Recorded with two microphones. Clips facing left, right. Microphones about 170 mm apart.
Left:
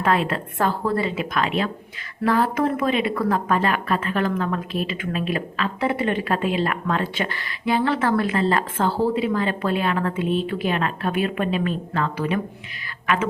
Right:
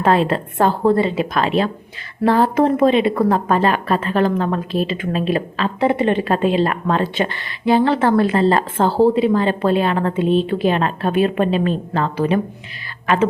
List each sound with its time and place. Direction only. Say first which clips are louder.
0.0 s a woman's voice: right 5 dB; 30° right (ahead or behind)